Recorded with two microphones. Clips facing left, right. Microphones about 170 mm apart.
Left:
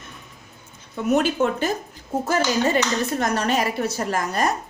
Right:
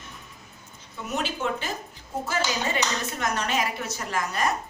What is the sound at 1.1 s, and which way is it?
A woman's voice, 50° left (ahead or behind).